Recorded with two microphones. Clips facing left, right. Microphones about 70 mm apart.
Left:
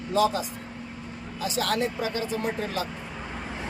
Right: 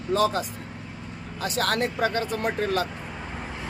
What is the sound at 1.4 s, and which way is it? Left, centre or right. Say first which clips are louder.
Speech: right 1 dB; right.